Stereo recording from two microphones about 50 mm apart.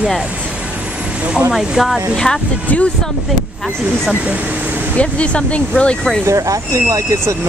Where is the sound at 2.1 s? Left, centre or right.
Centre.